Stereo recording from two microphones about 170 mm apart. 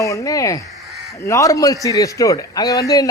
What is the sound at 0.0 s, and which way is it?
A man's voice, 20° left (ahead or behind).